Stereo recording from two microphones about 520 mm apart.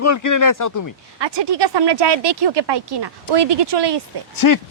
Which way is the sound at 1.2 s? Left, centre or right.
Right.